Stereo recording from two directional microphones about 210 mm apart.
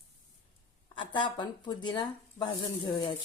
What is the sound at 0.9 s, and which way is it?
Dishes, 20° left (ahead or behind).